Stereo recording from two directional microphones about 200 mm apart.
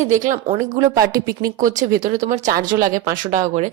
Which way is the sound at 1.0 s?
15° right (ahead or behind).